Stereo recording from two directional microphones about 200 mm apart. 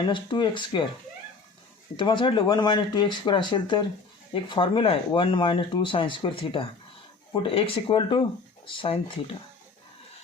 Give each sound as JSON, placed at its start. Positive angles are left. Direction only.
{"t": 0.0, "sound": "speech", "side_deg": 25}
{"t": 2.0, "sound": "speech", "side_deg": 25}